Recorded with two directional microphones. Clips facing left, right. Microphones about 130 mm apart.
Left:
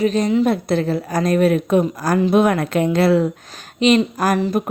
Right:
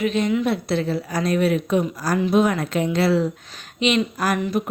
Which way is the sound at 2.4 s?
60° left (ahead or behind).